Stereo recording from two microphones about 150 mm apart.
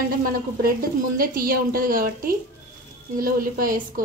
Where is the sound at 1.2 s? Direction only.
75° right (ahead or behind).